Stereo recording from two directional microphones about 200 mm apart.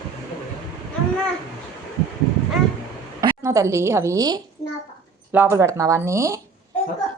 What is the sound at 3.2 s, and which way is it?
A woman's voice, 15° right (ahead or behind).